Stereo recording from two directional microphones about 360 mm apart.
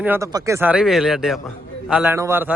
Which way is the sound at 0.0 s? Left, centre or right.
Centre.